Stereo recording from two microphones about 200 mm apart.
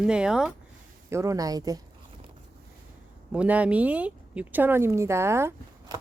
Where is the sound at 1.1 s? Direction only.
15° right (ahead or behind).